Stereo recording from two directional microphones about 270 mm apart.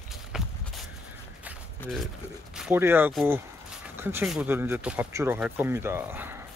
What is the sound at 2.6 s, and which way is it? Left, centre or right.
Speech, centre.